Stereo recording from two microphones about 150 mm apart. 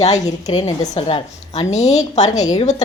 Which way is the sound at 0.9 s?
40° left (ahead or behind).